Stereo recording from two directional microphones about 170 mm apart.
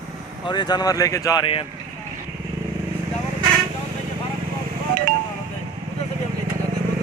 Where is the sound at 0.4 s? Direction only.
25° left (ahead or behind).